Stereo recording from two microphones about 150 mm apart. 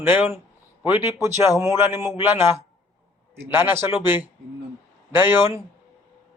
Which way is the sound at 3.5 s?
15° right (ahead or behind).